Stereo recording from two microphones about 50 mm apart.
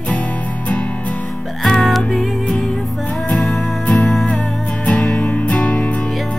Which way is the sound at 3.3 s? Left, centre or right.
Centre.